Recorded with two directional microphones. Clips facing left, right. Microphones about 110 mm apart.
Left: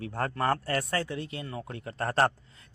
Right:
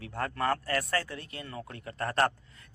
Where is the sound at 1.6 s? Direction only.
30° left (ahead or behind).